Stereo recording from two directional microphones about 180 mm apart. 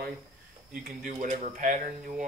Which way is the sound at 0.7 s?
50° right (ahead or behind).